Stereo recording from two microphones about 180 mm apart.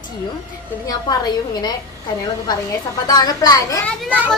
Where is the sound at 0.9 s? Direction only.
20° left (ahead or behind).